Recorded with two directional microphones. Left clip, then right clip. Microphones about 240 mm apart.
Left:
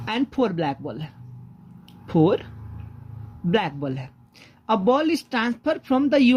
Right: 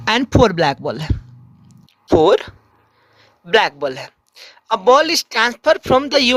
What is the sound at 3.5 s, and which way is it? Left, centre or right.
A man's voice, right.